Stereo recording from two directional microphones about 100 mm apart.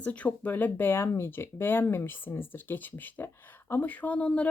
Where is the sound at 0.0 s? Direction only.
15° left (ahead or behind).